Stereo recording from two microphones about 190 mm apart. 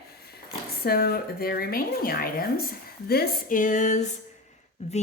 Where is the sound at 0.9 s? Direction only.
55° left (ahead or behind).